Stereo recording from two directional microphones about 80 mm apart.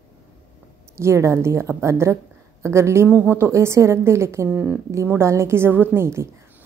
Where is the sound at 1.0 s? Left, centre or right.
Right.